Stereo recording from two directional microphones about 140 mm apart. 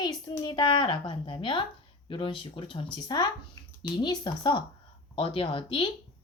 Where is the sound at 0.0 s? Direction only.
30° left (ahead or behind).